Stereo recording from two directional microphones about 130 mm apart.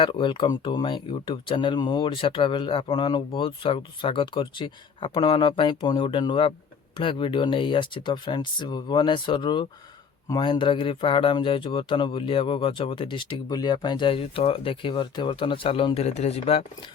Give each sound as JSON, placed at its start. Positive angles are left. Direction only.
{"t": 0.0, "sound": "speech", "side_deg": 40}
{"t": 16.0, "sound": "speech", "side_deg": 55}